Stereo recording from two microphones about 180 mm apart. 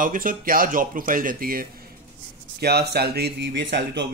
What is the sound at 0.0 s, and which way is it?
Speech, 50° right (ahead or behind).